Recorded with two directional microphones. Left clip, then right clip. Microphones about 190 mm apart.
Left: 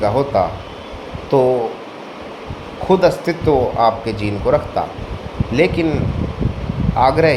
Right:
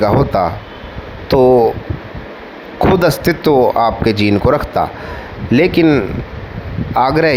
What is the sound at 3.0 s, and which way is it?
Speech, 50° right (ahead or behind).